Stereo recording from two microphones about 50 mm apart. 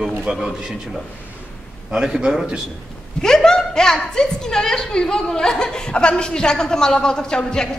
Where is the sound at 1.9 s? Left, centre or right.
Centre.